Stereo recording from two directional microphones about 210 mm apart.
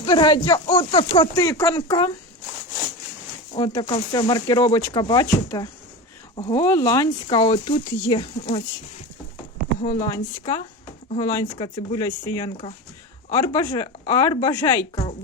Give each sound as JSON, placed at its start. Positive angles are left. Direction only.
{"t": 0.0, "sound": "speech", "side_deg": 20}
{"t": 3.5, "sound": "speech", "side_deg": 25}
{"t": 6.7, "sound": "speech", "side_deg": 10}
{"t": 10.1, "sound": "speech", "side_deg": 20}